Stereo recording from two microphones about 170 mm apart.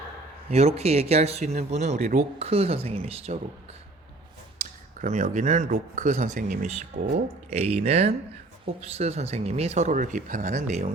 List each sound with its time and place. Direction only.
0.5 s speech: 35° right (ahead or behind)
2.4 s speech: 35° right (ahead or behind)
4.6 s speech: 45° right (ahead or behind)